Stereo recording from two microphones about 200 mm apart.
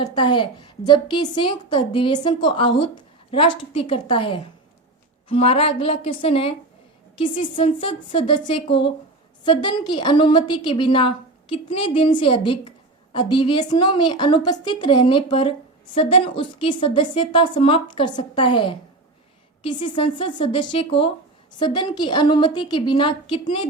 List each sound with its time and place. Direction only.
0.1 s a woman's voice: 20° left (ahead or behind)
7.5 s a woman's voice: 25° left (ahead or behind)